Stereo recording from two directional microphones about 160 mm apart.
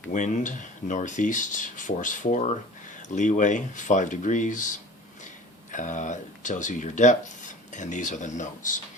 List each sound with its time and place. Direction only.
0.1 s speech: 50° left (ahead or behind)
5.7 s speech: 50° left (ahead or behind)